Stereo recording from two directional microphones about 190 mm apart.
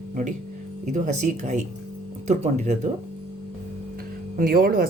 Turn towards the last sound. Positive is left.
turn(degrees=-50)  # may be behind; listen again after turning